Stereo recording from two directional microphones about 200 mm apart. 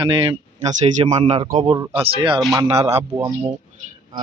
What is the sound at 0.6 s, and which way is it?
A man's voice, 35° right (ahead or behind).